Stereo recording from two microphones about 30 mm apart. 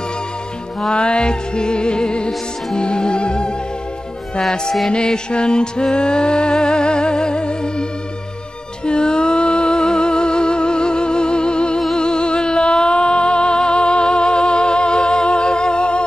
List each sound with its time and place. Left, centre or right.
0.9 s music: left
4.9 s music: left
8.8 s music: left